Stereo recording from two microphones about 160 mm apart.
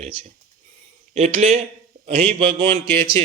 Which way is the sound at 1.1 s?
45° right (ahead or behind).